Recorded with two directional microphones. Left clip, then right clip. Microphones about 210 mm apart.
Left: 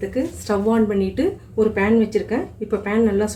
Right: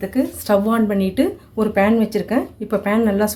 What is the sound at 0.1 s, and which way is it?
Speech, 45° right (ahead or behind).